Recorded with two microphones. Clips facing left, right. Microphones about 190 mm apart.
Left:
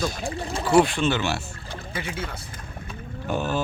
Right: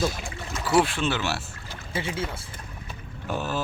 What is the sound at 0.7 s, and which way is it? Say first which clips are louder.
Speech: left 3 dB; centre (ahead or behind).